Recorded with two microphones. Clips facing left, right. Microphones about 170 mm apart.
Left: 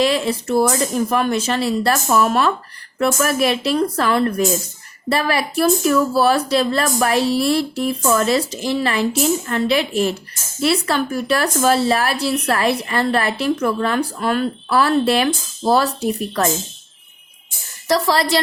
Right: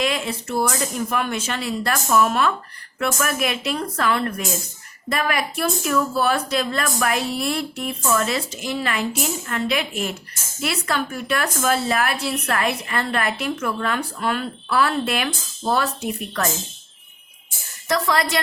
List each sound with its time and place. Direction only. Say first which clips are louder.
0.0 s speech: left 6 dB; 35° left (ahead or behind)
17.8 s speech: left 4 dB; 35° left (ahead or behind)